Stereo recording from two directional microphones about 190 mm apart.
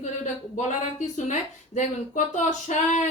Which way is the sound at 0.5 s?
40° left (ahead or behind).